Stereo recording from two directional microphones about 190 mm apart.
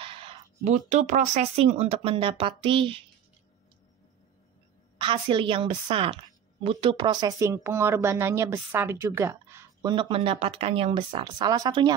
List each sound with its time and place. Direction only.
0.0 s a sound: 30° right (ahead or behind)
0.7 s speech: 40° right (ahead or behind)
4.9 s a woman's voice: 25° right (ahead or behind)